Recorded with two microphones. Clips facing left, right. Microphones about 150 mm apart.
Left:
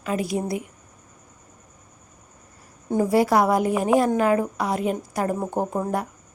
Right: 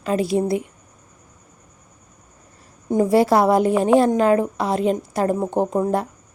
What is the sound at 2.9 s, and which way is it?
A woman's voice, 25° right (ahead or behind).